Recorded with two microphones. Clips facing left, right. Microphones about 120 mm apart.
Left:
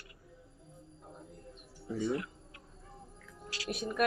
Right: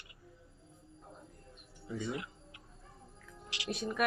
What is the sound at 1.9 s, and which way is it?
Tick-tock, 15° right (ahead or behind).